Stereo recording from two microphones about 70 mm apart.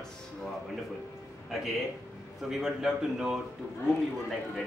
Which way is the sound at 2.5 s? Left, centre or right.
Centre.